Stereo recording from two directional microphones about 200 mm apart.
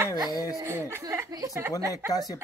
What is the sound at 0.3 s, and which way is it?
Speech, 15° left (ahead or behind).